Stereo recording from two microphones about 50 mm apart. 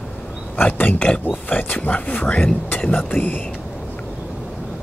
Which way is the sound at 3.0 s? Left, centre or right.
Left.